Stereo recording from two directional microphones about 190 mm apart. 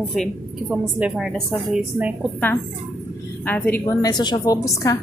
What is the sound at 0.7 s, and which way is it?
Speech, 5° right (ahead or behind).